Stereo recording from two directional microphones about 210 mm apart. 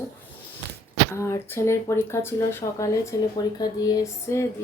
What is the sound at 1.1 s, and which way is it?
Speech, 15° left (ahead or behind).